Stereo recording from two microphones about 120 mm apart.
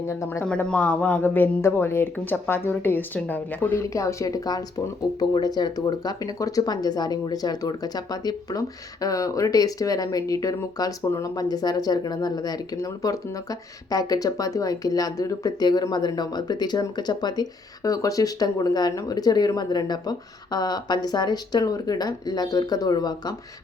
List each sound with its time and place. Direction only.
0.1 s speech: 20° left (ahead or behind)
0.4 s speech: 10° left (ahead or behind)
3.8 s speech: 25° left (ahead or behind)